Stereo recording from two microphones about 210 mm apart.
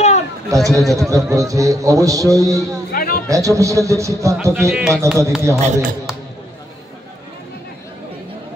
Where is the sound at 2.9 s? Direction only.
45° left (ahead or behind).